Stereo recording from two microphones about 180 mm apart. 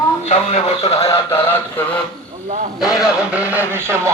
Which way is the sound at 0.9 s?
15° left (ahead or behind).